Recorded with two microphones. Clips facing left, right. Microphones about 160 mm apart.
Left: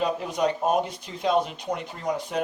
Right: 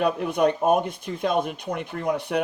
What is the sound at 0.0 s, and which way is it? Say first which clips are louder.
Speech: right 4 dB; 60° right (ahead or behind).